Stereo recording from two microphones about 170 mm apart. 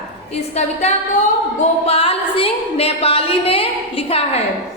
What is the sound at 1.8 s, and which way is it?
A woman's voice, 35° left (ahead or behind).